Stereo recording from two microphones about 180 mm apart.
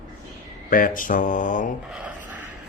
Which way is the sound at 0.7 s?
50° left (ahead or behind).